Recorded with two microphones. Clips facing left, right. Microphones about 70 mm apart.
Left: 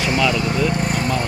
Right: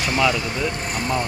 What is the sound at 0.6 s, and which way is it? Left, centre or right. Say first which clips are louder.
Vehicle: left 5 dB; right.